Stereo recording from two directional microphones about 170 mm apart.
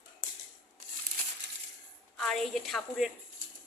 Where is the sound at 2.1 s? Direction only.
Centre (ahead or behind).